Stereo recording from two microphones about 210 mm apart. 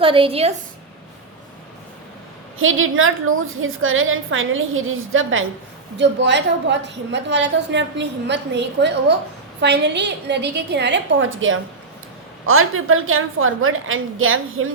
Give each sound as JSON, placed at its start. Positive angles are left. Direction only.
{"t": 0.0, "sound": "a woman's voice", "side_deg": -25}
{"t": 2.6, "sound": "a woman's voice", "side_deg": -70}
{"t": 6.0, "sound": "a woman's voice", "side_deg": -55}
{"t": 12.5, "sound": "a woman's voice", "side_deg": -80}